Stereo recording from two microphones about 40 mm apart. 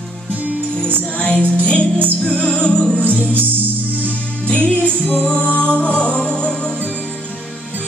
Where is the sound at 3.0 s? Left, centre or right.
Right.